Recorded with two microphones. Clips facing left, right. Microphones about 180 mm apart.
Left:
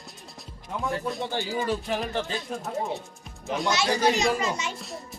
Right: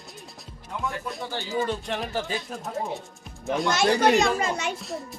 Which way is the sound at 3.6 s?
55° right (ahead or behind).